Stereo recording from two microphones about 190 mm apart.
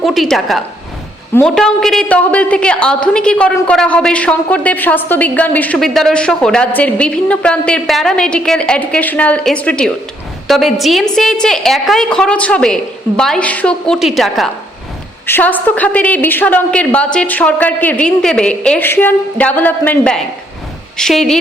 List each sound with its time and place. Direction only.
0.0 s a woman's voice: centre (ahead or behind)